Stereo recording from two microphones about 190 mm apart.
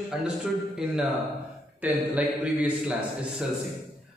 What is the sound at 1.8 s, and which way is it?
A man's voice, 10° right (ahead or behind).